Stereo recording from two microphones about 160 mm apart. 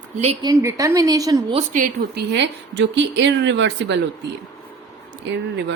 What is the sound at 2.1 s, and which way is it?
A woman's voice, 90° right.